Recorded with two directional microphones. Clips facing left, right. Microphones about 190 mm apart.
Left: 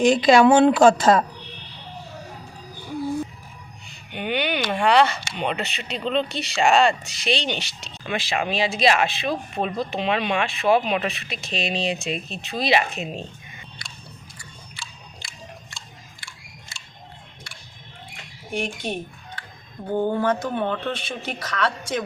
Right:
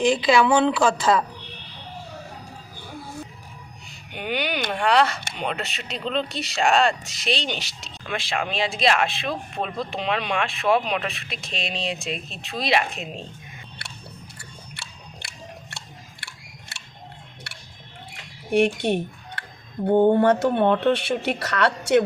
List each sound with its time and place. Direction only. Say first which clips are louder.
0.2 s a woman's voice: left 4 dB; 45° left (ahead or behind)
4.1 s speech: left 2 dB; centre (ahead or behind)
13.8 s chewing: right 2 dB; 65° right (ahead or behind)
14.3 s biting: even; 65° right (ahead or behind)
16.2 s scissors: right 1 dB; 65° right (ahead or behind)
18.5 s speech: right 8 dB; 70° right (ahead or behind)
19.4 s a sound: right 12 dB; 70° right (ahead or behind)
20.1 s speech: right 5 dB; 65° right (ahead or behind)